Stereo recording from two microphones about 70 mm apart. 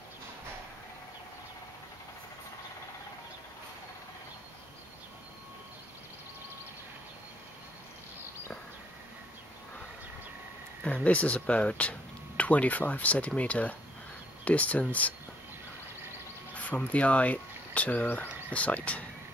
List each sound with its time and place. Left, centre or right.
11.1 s speech: left
16.5 s speech: left